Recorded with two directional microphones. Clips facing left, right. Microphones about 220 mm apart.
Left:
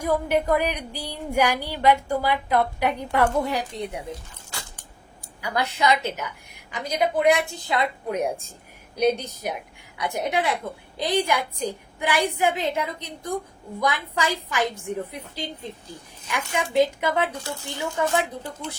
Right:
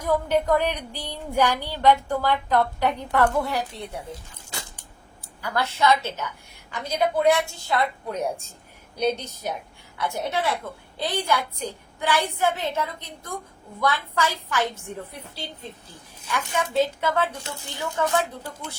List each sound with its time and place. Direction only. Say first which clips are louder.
0.0 s speech: even; 10° left (ahead or behind)
5.4 s speech: even; 15° left (ahead or behind)
16.2 s speech: even; 10° left (ahead or behind)